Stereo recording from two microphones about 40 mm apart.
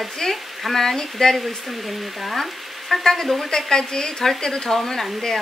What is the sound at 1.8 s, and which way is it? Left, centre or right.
Speech, centre.